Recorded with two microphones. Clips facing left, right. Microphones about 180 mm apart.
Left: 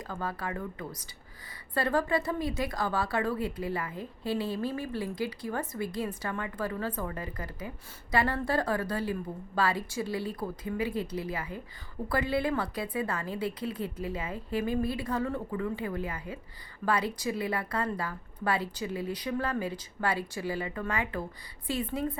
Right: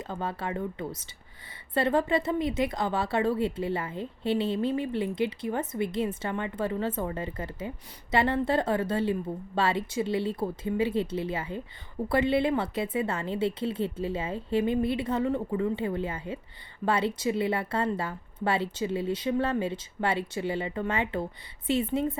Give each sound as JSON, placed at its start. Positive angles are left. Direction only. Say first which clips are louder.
{"t": 0.0, "sound": "speech", "louder": "right 2 dB", "side_deg": -25}